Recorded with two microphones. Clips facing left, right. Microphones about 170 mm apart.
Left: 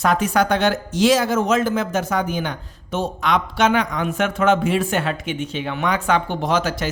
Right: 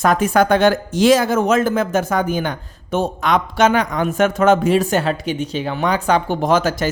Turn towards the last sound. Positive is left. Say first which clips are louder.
# right 4 dB
turn(degrees=-45)  # may be behind; listen again after turning